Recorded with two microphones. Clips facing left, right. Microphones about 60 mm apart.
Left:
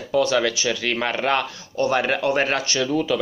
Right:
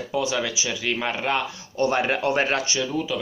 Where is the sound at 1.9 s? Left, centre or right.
Right.